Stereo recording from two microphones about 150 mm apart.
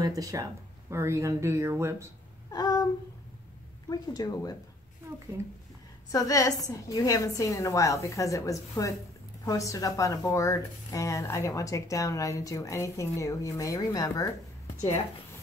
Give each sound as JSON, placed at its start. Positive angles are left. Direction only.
{"t": 0.0, "sound": "speech", "side_deg": -25}
{"t": 2.5, "sound": "a sound", "side_deg": 25}
{"t": 3.9, "sound": "speech", "side_deg": 25}
{"t": 6.0, "sound": "speech", "side_deg": 25}